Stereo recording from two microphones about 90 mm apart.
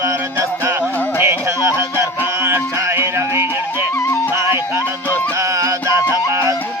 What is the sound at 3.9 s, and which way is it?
Music, 30° left (ahead or behind).